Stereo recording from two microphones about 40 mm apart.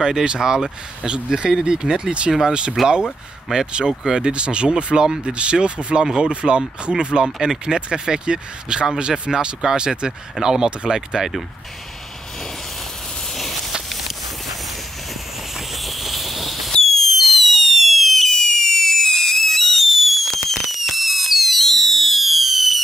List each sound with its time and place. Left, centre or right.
0.0 s speech: centre
2.8 s speech: centre
3.5 s speech: right
5.0 s speech: centre
5.3 s speech: right
13.4 s a sound: centre
15.7 s a sound: centre
16.7 s fireworks: centre